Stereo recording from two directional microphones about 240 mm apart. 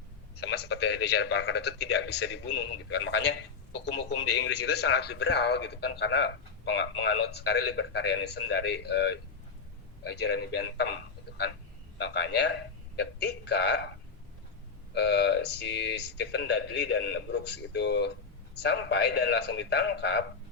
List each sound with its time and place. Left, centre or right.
0.3 s a man's voice: left
14.9 s speech: left